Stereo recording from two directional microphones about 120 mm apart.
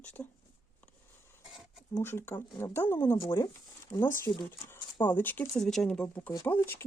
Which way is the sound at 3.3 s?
30° left (ahead or behind).